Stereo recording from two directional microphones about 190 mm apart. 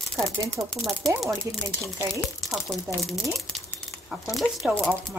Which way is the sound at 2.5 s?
Centre (ahead or behind).